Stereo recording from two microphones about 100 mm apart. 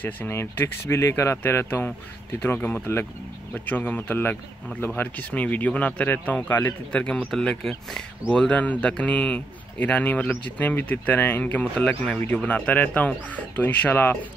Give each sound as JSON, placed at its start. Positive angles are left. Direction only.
{"t": 0.0, "sound": "speech", "side_deg": 20}